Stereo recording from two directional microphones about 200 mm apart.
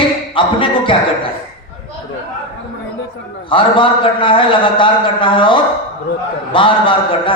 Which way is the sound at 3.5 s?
25° left (ahead or behind).